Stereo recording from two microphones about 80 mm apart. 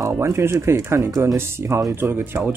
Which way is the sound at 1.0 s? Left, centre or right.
Right.